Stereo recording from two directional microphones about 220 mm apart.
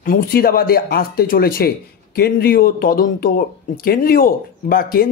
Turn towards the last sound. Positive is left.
turn(degrees=40)  # may be behind; listen again after turning